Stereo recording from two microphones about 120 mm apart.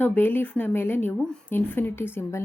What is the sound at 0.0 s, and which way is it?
Speech, 15° left (ahead or behind).